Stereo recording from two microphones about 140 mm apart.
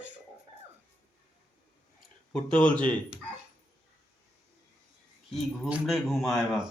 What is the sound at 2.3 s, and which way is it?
Speech, 10° left (ahead or behind).